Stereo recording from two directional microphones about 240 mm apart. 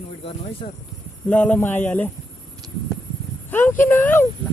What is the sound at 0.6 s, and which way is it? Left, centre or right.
Speech, left.